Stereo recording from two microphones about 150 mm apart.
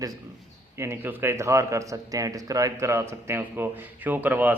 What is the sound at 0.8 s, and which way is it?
A man's voice, 15° right (ahead or behind).